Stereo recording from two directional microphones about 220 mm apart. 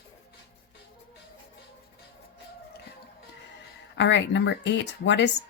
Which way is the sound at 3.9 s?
55° left (ahead or behind).